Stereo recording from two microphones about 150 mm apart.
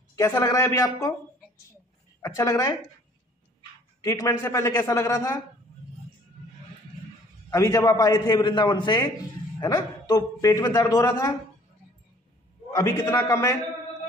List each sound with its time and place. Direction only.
0.1 s a man's voice: 20° left (ahead or behind)
2.2 s a man's voice: 20° left (ahead or behind)
4.0 s a man's voice: 20° left (ahead or behind)
7.5 s a man's voice: 20° left (ahead or behind)
12.7 s a man's voice: 20° left (ahead or behind)